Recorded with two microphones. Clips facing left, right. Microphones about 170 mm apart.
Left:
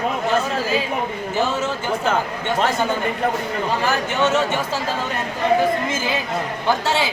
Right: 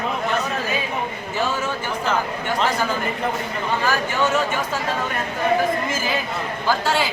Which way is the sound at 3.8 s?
25° left (ahead or behind).